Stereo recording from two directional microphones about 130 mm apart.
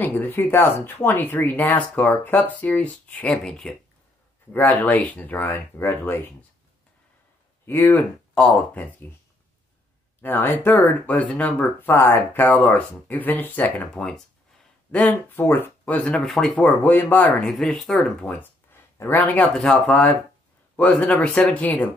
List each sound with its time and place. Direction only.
0.0 s speech: 15° left (ahead or behind)
7.6 s speech: 15° left (ahead or behind)
10.2 s speech: 15° left (ahead or behind)
18.7 s a sound: 15° left (ahead or behind)
19.5 s speech: 5° left (ahead or behind)